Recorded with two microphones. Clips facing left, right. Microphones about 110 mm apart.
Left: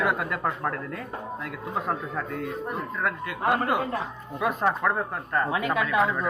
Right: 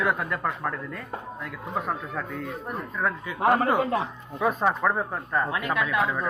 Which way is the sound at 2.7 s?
Centre (ahead or behind).